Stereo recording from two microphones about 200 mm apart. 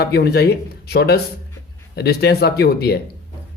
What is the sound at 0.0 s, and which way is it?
Speech, 55° left (ahead or behind).